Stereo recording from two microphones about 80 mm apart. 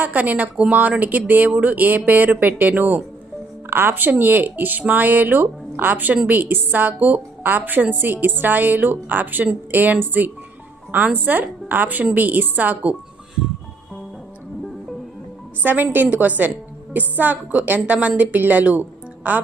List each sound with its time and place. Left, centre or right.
0.0 s a woman's voice: right
15.6 s a woman's voice: right